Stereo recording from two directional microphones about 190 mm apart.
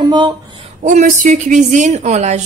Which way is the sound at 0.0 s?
25° right (ahead or behind).